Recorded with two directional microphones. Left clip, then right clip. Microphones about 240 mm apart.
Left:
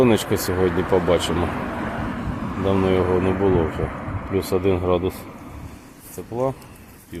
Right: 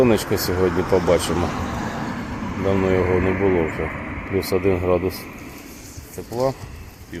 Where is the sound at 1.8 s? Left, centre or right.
Right.